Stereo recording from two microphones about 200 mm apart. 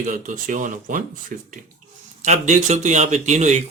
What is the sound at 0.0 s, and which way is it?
Speech, 40° right (ahead or behind).